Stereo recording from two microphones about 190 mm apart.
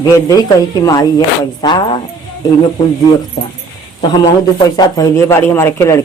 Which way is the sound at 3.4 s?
25° left (ahead or behind).